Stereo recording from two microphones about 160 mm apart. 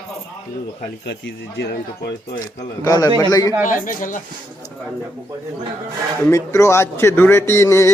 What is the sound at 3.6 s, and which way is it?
Speech, 55° left (ahead or behind).